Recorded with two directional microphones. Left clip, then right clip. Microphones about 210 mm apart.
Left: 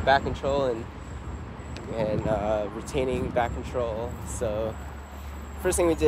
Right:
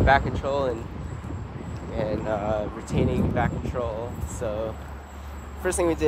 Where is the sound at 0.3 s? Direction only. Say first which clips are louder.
Even; 15° left (ahead or behind).